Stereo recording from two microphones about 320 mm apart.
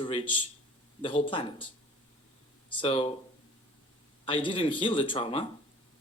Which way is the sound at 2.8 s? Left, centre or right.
Centre.